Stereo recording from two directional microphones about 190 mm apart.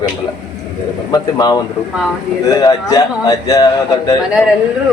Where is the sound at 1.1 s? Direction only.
20° left (ahead or behind).